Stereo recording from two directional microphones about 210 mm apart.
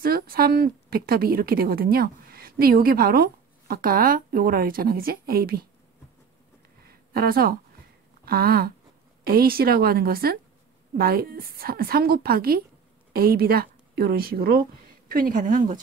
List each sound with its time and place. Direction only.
0.0 s a woman's voice: 45° right (ahead or behind)
6.9 s a sound: 45° right (ahead or behind)
8.3 s a woman's voice: 45° right (ahead or behind)